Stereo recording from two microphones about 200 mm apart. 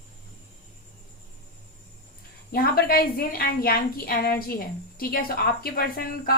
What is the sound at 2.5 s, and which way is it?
A woman's voice, 50° left (ahead or behind).